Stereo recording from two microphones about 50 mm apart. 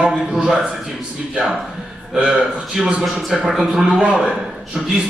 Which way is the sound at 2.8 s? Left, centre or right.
Centre.